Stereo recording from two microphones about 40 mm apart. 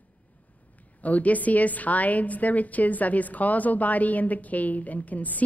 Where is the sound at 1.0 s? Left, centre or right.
Left.